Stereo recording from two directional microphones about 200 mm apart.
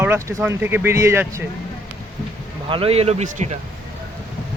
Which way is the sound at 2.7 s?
30° right (ahead or behind).